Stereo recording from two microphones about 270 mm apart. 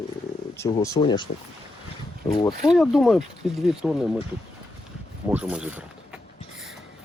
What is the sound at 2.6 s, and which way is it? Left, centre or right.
Speech, centre.